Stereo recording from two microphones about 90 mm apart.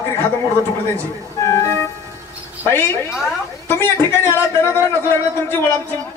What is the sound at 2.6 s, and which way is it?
A woman's voice, 25° left (ahead or behind).